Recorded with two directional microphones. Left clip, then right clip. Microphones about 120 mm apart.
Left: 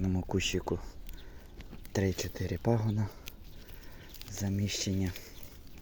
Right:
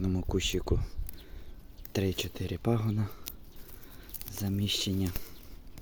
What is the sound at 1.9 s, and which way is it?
Speech, 25° right (ahead or behind).